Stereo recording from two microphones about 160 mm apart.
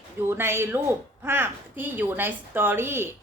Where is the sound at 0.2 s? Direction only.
15° right (ahead or behind).